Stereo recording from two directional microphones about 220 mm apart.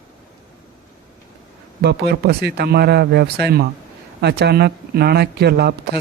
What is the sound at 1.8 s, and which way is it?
Speech, 50° right (ahead or behind).